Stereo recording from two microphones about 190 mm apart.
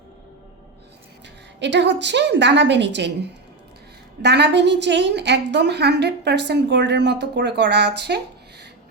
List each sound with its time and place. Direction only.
1.5 s a woman's voice: 65° right (ahead or behind)
4.2 s a woman's voice: 60° right (ahead or behind)